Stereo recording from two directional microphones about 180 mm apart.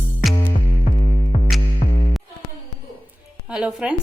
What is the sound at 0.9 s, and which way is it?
Music, 45° left (ahead or behind).